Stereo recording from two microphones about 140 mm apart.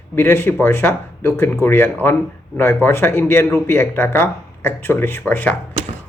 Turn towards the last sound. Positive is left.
turn(degrees=10)  # may be behind; listen again after turning